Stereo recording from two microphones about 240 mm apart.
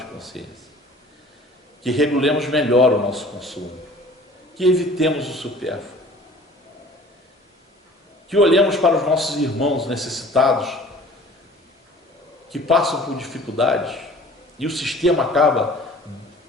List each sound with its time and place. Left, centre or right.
0.0 s a sound: centre
1.8 s a man's voice: centre
8.3 s a man's voice: centre
12.5 s a man's voice: centre